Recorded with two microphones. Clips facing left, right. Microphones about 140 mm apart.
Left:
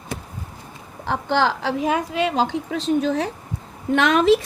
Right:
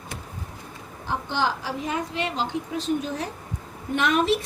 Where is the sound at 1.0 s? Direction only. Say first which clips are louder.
Left 6 dB; 75° left (ahead or behind).